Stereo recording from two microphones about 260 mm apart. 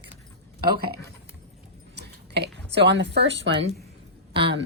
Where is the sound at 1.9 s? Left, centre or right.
Right.